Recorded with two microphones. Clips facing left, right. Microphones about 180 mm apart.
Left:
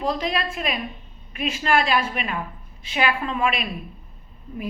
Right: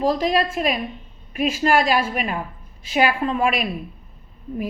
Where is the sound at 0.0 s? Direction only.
40° right (ahead or behind).